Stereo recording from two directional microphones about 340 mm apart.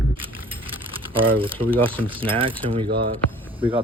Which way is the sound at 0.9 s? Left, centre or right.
Centre.